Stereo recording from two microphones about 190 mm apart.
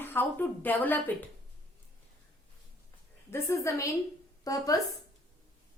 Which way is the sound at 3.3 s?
15° left (ahead or behind).